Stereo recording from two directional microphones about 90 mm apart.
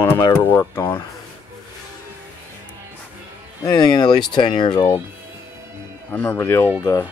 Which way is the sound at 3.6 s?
50° left (ahead or behind).